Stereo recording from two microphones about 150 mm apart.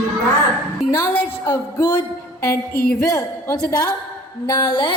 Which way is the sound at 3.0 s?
20° left (ahead or behind).